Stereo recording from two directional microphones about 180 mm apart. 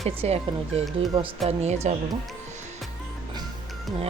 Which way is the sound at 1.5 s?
35° right (ahead or behind).